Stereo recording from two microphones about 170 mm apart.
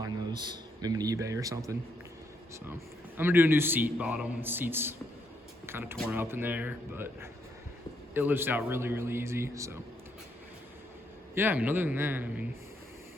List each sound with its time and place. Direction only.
0.0 s a man's voice: 25° right (ahead or behind)
11.3 s a man's voice: 10° right (ahead or behind)